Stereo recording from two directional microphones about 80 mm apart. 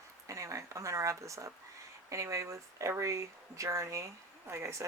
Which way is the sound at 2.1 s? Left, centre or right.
Right.